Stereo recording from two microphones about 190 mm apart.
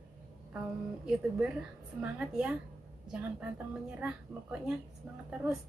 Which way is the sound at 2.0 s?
5° right (ahead or behind).